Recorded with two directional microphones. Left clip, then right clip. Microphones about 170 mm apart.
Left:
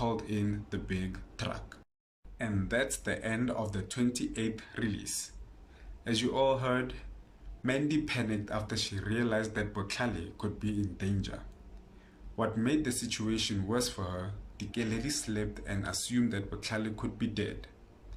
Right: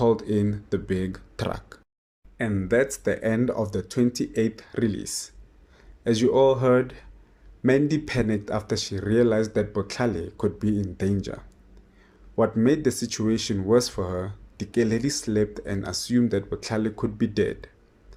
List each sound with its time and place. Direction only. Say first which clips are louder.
0.0 s speech: right 12 dB; 40° right (ahead or behind)
12.4 s speech: right 10 dB; 40° right (ahead or behind)